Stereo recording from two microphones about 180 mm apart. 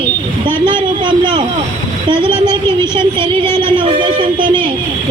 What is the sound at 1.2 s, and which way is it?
Speech, 25° right (ahead or behind).